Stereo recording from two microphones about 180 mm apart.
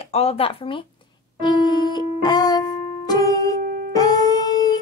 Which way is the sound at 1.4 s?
25° left (ahead or behind).